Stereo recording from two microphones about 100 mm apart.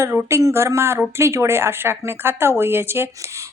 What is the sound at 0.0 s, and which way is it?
A woman's voice, 25° right (ahead or behind).